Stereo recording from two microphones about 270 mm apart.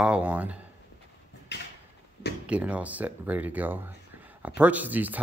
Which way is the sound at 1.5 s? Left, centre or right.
Left.